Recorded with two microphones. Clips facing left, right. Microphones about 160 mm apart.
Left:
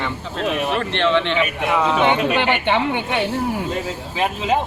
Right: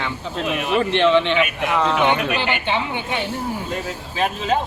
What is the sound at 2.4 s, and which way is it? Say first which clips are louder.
Speech: left 4 dB; 65° left (ahead or behind).